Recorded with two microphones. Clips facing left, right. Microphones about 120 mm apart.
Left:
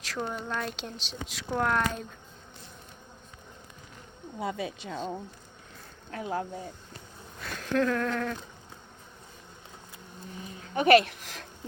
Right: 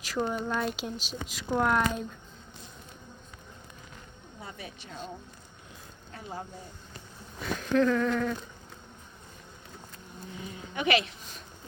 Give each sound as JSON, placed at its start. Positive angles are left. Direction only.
{"t": 0.0, "sound": "speech", "side_deg": -5}
{"t": 4.4, "sound": "speech", "side_deg": 90}
{"t": 6.1, "sound": "speech", "side_deg": 90}
{"t": 7.4, "sound": "speech", "side_deg": 0}
{"t": 10.8, "sound": "speech", "side_deg": 50}